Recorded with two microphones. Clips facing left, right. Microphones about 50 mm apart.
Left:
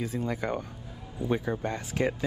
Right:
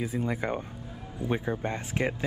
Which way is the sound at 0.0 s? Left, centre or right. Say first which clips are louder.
Right 1 dB; centre.